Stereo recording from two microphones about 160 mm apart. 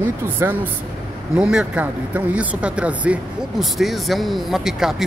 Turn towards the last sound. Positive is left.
turn(degrees=0)  # may be behind; listen again after turning